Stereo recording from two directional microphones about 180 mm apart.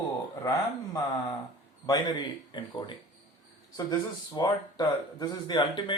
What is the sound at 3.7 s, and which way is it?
Speech, 20° left (ahead or behind).